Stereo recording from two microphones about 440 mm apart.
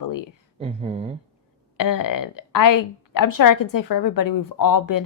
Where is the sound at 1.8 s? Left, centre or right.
Left.